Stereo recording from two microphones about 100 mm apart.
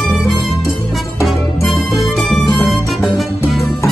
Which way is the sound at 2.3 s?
Centre (ahead or behind).